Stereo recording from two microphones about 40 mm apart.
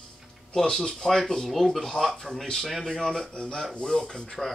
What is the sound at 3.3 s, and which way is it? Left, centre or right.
Speech, left.